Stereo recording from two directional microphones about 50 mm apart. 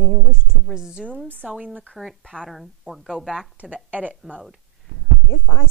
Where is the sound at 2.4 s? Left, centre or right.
Centre.